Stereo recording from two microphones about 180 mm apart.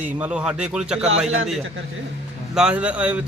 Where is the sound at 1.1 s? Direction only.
35° right (ahead or behind).